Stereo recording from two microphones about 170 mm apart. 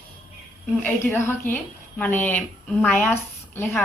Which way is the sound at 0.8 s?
10° left (ahead or behind).